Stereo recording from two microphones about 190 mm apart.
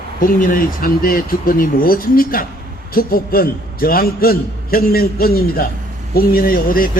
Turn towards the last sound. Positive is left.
turn(degrees=50)  # may be behind; listen again after turning